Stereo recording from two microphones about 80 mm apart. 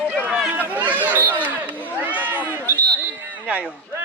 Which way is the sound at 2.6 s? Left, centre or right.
Left.